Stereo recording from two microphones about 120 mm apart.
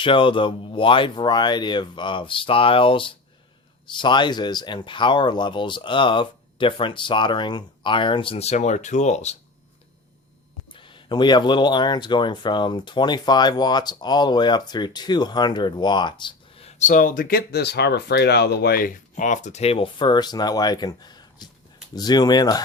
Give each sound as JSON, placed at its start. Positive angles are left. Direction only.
{"t": 0.0, "sound": "speech", "side_deg": 45}
{"t": 10.7, "sound": "speech", "side_deg": 45}
{"t": 16.6, "sound": "speech", "side_deg": 85}
{"t": 18.9, "sound": "speech", "side_deg": 90}